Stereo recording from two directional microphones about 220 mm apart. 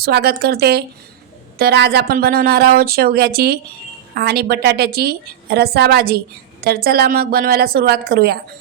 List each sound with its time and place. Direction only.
0.0 s speech: 45° right (ahead or behind)